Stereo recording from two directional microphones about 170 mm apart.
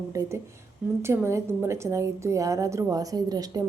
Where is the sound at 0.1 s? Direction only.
20° right (ahead or behind).